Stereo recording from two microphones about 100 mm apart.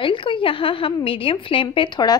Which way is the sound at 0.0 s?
55° left (ahead or behind).